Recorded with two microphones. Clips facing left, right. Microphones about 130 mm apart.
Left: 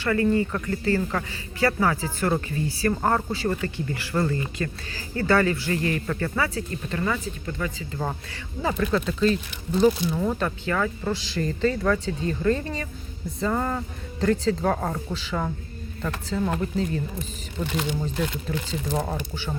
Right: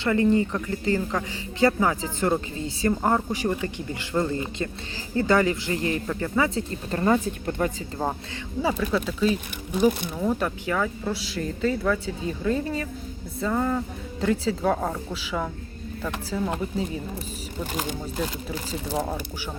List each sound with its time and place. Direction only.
0.0 s a man's voice: 20° right (ahead or behind)
6.9 s speech: 40° right (ahead or behind)
8.6 s speech: 5° right (ahead or behind)
18.7 s speech: 10° right (ahead or behind)